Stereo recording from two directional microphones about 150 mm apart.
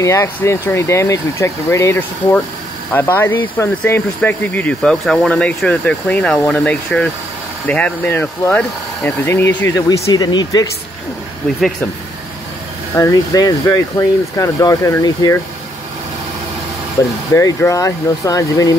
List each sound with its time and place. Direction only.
0.0 s speech: 20° left (ahead or behind)
12.9 s speech: 20° left (ahead or behind)
17.0 s speech: 20° left (ahead or behind)